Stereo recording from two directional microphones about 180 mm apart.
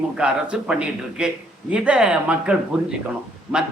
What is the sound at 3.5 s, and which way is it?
Speech, 5° right (ahead or behind).